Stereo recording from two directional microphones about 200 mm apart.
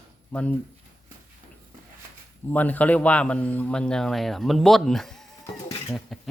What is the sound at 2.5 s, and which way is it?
A man's voice, 10° left (ahead or behind).